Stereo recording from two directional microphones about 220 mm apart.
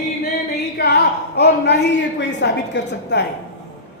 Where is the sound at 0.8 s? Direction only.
50° left (ahead or behind).